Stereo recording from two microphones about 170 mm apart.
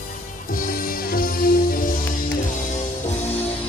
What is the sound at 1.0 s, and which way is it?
Music, 60° left (ahead or behind).